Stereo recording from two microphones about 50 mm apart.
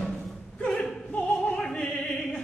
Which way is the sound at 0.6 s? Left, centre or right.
Centre.